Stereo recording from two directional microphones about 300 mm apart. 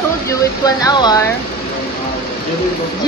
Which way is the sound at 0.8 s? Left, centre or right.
Centre.